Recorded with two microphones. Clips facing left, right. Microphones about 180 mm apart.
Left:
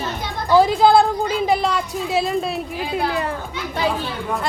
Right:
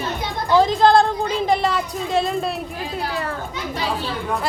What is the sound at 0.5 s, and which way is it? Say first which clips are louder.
A woman's voice: left 1 dB; 10° left (ahead or behind).